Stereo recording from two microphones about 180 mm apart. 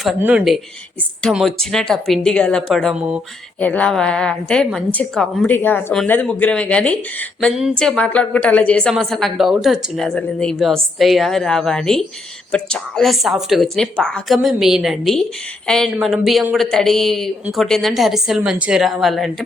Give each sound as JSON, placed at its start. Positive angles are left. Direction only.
{"t": 0.2, "sound": "speech", "side_deg": -10}
{"t": 3.6, "sound": "a woman's voice", "side_deg": 5}